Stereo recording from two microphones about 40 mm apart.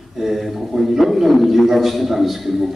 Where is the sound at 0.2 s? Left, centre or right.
Centre.